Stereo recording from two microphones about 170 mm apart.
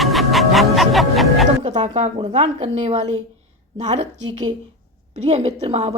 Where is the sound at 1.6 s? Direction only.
45° right (ahead or behind).